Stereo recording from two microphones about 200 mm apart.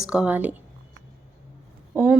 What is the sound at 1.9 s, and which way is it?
Speech, 5° right (ahead or behind).